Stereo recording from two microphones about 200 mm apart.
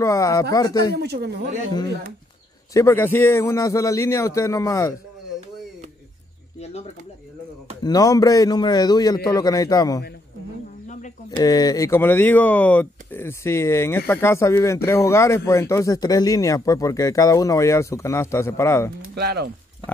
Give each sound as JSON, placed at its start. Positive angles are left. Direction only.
{"t": 0.0, "sound": "speech", "side_deg": 15}
{"t": 0.9, "sound": "speech", "side_deg": -55}
{"t": 2.7, "sound": "speech", "side_deg": 15}
{"t": 7.8, "sound": "a man's voice", "side_deg": 20}
{"t": 11.3, "sound": "speech", "side_deg": 20}
{"t": 18.9, "sound": "speech", "side_deg": -55}